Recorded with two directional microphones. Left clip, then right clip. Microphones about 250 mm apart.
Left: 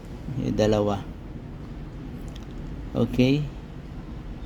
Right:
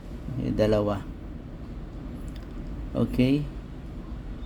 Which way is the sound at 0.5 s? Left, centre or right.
Centre.